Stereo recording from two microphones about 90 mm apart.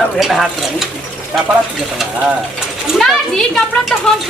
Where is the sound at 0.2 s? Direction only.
Centre (ahead or behind).